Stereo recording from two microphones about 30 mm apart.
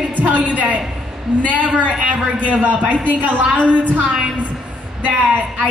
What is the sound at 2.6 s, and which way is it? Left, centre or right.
Speech, right.